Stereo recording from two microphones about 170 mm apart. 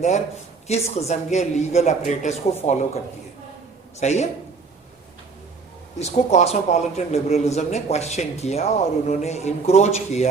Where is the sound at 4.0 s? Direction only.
40° left (ahead or behind).